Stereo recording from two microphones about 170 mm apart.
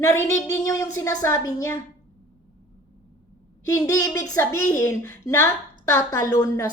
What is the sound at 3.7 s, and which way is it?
A woman's voice, 20° left (ahead or behind).